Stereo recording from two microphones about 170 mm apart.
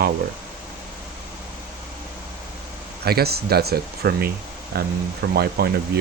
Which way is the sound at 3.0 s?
70° right (ahead or behind).